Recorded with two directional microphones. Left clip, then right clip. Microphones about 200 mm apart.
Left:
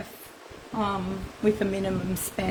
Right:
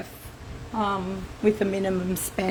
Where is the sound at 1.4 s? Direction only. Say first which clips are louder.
Right 2 dB; 25° right (ahead or behind).